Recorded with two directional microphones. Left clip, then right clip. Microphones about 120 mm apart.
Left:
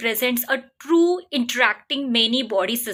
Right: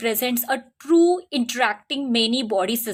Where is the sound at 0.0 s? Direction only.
30° right (ahead or behind).